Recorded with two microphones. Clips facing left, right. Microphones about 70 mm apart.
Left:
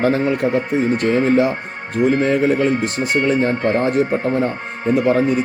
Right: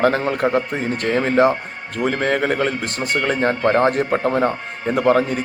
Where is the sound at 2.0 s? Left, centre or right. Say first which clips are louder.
Left 3 dB; right.